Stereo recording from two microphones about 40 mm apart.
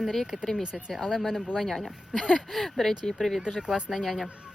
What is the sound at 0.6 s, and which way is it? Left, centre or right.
Speech, centre.